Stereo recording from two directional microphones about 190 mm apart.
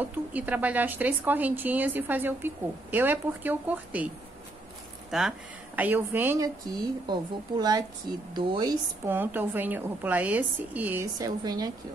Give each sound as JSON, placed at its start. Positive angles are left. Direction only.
{"t": 0.0, "sound": "speech", "side_deg": -10}
{"t": 5.1, "sound": "speech", "side_deg": 0}
{"t": 9.1, "sound": "speech", "side_deg": -10}